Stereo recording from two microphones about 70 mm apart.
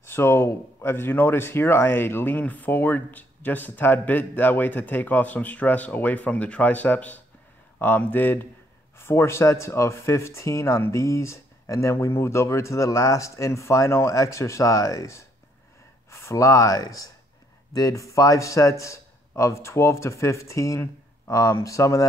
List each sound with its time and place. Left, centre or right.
0.0 s speech: left